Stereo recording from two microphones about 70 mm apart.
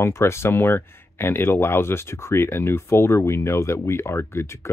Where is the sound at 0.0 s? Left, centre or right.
Left.